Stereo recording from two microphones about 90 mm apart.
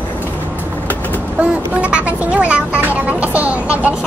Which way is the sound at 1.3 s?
15° right (ahead or behind).